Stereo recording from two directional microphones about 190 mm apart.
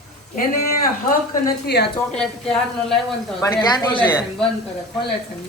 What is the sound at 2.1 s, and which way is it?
Speech, 5° left (ahead or behind).